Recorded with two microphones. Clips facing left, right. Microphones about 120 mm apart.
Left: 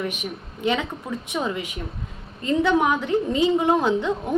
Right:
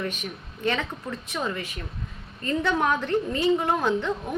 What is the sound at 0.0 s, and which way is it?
A woman's voice, 15° left (ahead or behind).